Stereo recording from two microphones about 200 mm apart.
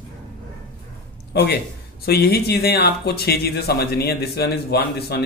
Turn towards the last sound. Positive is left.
turn(degrees=50)  # may be behind; listen again after turning